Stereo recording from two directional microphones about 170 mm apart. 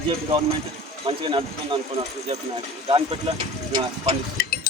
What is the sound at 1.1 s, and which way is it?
Speech, 30° right (ahead or behind).